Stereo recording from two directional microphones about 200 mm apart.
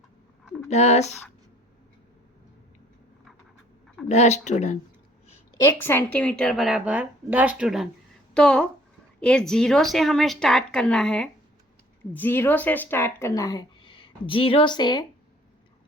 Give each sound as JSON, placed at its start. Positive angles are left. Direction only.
{"t": 0.4, "sound": "a sound", "side_deg": 5}
{"t": 0.7, "sound": "speech", "side_deg": 35}
{"t": 4.1, "sound": "speech", "side_deg": 35}
{"t": 5.6, "sound": "a woman's voice", "side_deg": 10}